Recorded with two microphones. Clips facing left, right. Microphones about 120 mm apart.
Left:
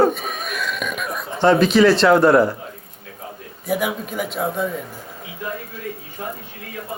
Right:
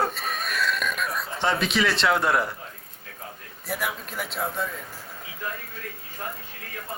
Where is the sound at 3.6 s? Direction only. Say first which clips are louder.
Left 8 dB; centre (ahead or behind).